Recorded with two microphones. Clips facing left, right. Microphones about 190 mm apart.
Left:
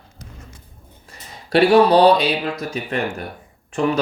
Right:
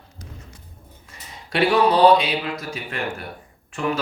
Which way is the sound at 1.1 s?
35° left (ahead or behind).